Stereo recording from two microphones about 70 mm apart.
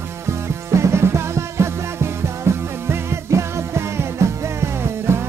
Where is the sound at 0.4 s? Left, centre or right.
Right.